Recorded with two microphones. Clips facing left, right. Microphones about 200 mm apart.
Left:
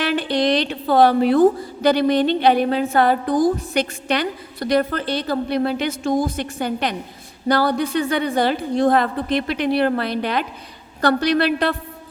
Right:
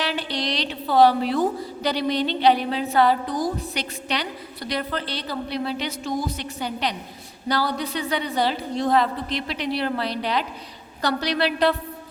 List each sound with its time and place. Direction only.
0.0 s a woman's voice: 55° left (ahead or behind)